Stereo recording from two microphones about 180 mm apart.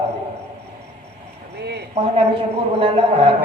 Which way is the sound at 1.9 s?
30° right (ahead or behind).